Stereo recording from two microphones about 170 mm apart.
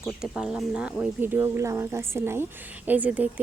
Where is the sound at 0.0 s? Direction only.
5° right (ahead or behind).